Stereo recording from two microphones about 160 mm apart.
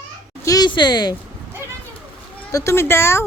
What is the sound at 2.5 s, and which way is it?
Speech, 20° left (ahead or behind).